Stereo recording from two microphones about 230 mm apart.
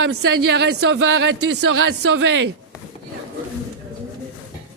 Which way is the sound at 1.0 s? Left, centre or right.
Right.